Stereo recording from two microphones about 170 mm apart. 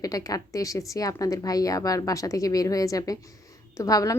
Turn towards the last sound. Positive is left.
turn(degrees=20)  # may be behind; listen again after turning